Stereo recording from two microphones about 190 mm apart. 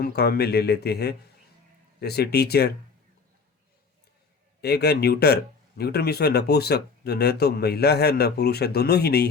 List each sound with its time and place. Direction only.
0.0 s speech: 55° left (ahead or behind)
4.6 s speech: 60° left (ahead or behind)